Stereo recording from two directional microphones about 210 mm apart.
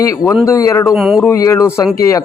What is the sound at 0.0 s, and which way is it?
Speech, 15° left (ahead or behind).